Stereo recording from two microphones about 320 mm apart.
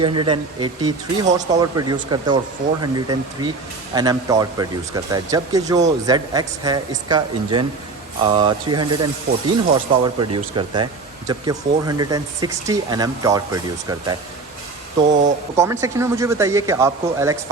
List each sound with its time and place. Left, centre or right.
0.0 s speech: centre
9.3 s speech: right
9.7 s speech: centre
15.0 s speech: right
15.5 s speech: centre